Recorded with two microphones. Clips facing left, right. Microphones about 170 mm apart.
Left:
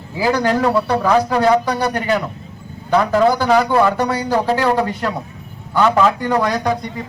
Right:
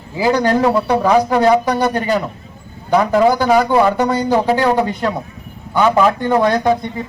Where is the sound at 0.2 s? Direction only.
20° right (ahead or behind).